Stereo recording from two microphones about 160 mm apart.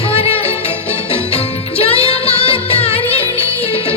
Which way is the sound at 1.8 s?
35° left (ahead or behind).